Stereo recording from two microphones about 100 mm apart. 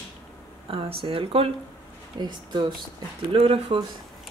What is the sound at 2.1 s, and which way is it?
Speech, 45° right (ahead or behind).